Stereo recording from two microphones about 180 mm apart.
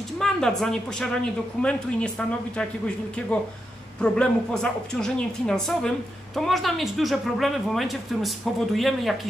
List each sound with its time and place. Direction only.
0.2 s speech: 5° left (ahead or behind)